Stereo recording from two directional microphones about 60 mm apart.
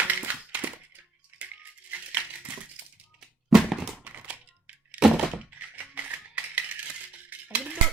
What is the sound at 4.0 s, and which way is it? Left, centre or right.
Thunk, right.